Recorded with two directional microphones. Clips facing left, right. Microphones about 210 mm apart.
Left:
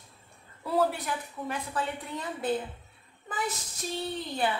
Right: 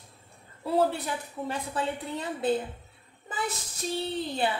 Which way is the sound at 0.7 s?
25° right (ahead or behind).